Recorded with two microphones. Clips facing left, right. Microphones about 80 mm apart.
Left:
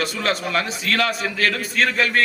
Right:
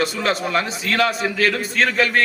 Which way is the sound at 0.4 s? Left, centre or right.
Centre.